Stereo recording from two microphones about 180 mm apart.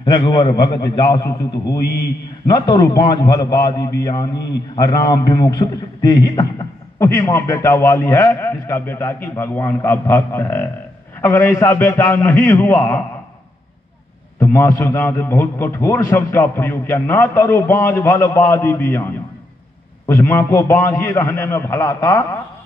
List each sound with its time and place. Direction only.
0.0 s a man's voice: 25° left (ahead or behind)
1.8 s speech: 65° left (ahead or behind)
2.5 s a man's voice: 25° left (ahead or behind)
14.4 s a man's voice: 15° left (ahead or behind)